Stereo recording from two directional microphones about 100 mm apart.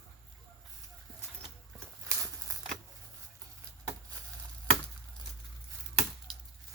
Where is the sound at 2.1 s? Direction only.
30° right (ahead or behind).